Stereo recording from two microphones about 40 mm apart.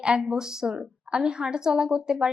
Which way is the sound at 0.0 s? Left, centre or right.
Right.